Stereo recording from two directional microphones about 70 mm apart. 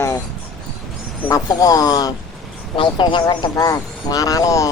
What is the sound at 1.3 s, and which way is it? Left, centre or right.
Speech, left.